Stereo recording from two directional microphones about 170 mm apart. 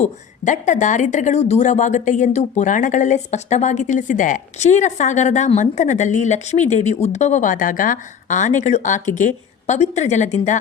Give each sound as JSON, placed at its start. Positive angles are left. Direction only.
{"t": 0.0, "sound": "speech", "side_deg": 45}